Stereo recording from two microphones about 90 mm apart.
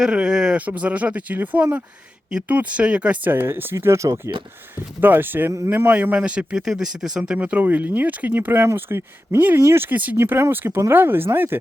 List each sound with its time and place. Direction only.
0.0 s speech: 10° right (ahead or behind); by 4.3 s 35° right (ahead or behind)
4.9 s speech: 20° right (ahead or behind); by 7.3 s 5° right (ahead or behind)
7.3 s speech: 15° right (ahead or behind)